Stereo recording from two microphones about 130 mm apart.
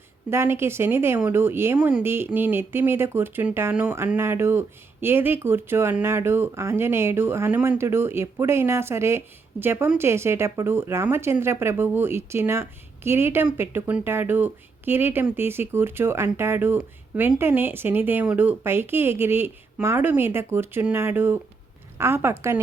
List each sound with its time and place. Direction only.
0.3 s speech: 20° right (ahead or behind)